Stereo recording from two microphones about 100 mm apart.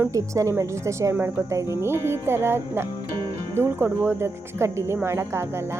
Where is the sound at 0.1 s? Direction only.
35° right (ahead or behind).